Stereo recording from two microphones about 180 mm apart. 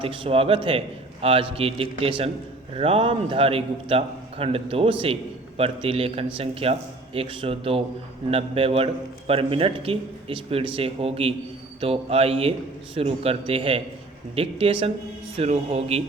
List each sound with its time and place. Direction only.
0.0 s a man's voice: 30° right (ahead or behind)